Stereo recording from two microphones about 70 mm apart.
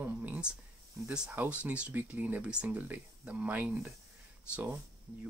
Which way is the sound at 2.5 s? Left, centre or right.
Centre.